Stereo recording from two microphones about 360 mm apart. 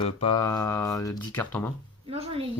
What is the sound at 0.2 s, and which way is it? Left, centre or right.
Speech, centre.